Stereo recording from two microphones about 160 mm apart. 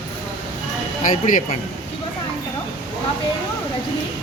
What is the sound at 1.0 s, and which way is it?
Speech, 55° left (ahead or behind).